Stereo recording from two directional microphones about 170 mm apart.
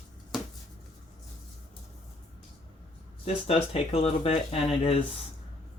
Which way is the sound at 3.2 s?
35° left (ahead or behind).